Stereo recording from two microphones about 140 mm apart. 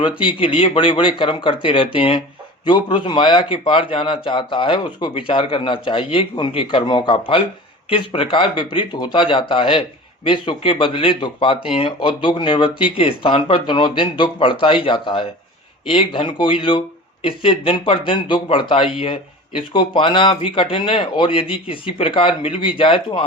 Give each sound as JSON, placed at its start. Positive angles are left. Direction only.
{"t": 0.2, "sound": "speech", "side_deg": 40}